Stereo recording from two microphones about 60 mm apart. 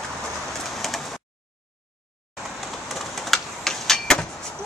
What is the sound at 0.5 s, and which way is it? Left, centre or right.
Printer, centre.